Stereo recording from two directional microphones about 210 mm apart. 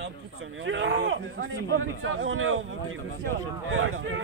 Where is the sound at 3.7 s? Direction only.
65° right (ahead or behind).